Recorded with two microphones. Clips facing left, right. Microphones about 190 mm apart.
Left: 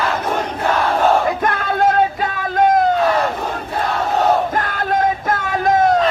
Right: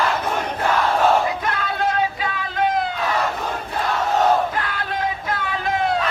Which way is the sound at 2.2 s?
45° left (ahead or behind).